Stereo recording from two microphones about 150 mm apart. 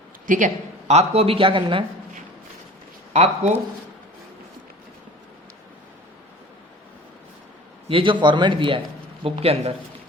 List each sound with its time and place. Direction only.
0.3 s speech: 60° right (ahead or behind); by 1.8 s 35° right (ahead or behind)
3.1 s speech: 45° right (ahead or behind)
7.9 s speech: 35° right (ahead or behind)